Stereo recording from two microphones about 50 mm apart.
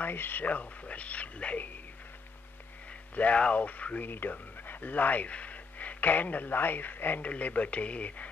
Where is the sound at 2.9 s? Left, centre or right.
Left.